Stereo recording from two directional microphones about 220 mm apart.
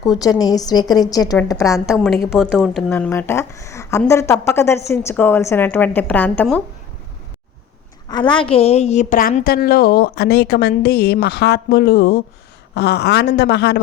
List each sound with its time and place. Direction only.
0.2 s a woman's voice: 15° left (ahead or behind)
1.7 s a woman's voice: centre (ahead or behind)
8.0 s a woman's voice: 20° left (ahead or behind); by 13.7 s 50° left (ahead or behind)